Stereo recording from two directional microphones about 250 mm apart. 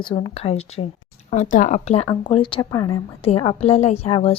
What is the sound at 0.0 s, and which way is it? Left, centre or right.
Speech, centre.